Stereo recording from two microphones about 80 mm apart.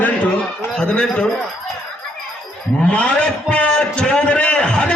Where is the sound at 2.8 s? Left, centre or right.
Centre.